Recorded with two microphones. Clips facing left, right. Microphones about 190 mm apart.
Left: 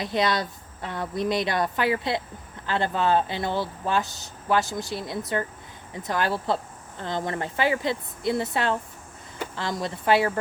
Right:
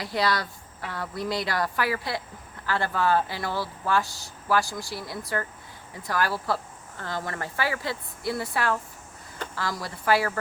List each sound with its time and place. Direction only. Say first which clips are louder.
0.0 s speech: left 2 dB; 20° left (ahead or behind)